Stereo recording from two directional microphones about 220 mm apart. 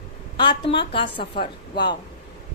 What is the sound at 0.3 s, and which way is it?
A woman's voice, 20° left (ahead or behind).